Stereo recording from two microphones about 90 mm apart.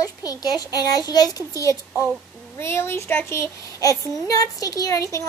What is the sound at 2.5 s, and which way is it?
A child's voice, 30° left (ahead or behind).